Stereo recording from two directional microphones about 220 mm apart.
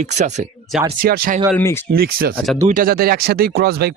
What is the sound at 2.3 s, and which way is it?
Speech, centre (ahead or behind).